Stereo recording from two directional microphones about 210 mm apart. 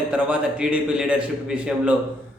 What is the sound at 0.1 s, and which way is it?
A man's voice, 5° right (ahead or behind).